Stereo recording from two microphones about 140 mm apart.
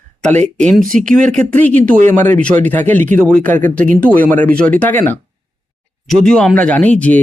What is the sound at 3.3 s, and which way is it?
Speech, 65° right (ahead or behind).